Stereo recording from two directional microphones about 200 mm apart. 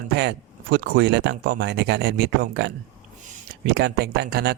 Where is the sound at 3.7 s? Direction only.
55° right (ahead or behind).